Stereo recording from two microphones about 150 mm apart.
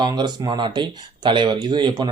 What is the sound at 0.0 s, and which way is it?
Speech, 30° right (ahead or behind).